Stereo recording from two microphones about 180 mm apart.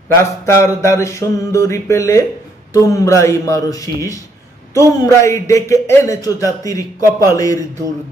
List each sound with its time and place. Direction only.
0.2 s speech: 15° left (ahead or behind)